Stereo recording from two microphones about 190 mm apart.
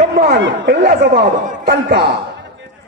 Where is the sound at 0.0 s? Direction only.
40° right (ahead or behind).